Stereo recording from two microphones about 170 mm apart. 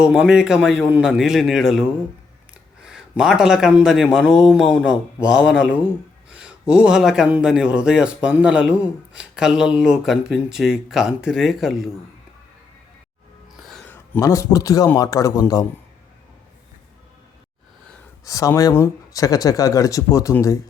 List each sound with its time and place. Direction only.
0.0 s a man's voice: 5° right (ahead or behind)
13.6 s a sound: centre (ahead or behind); by 14.8 s 20° left (ahead or behind)
14.9 s speech: 20° left (ahead or behind)
18.3 s speech: 20° left (ahead or behind)